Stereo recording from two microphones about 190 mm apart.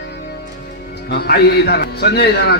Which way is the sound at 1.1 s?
55° left (ahead or behind).